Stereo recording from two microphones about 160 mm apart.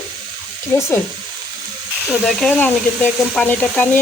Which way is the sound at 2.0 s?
Centre (ahead or behind).